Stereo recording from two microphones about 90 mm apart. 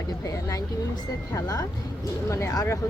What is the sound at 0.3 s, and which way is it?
Speech, 40° left (ahead or behind).